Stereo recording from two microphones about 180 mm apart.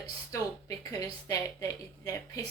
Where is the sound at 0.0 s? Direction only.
20° left (ahead or behind).